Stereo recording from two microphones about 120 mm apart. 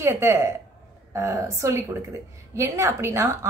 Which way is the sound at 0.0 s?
20° right (ahead or behind).